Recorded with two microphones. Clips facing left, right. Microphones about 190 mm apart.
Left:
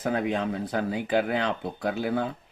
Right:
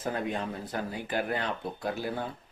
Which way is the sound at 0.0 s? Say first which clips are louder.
Left 5 dB; 75° left (ahead or behind).